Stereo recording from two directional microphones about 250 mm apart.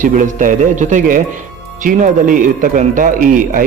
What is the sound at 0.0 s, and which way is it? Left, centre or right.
A man's voice, right.